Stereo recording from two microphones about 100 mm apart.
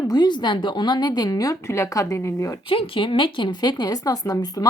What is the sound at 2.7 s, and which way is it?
Speech, 60° left (ahead or behind).